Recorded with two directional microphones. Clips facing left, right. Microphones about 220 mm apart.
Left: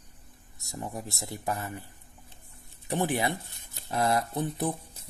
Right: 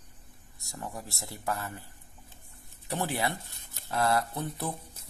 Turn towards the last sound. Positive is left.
turn(degrees=20)  # may be behind; listen again after turning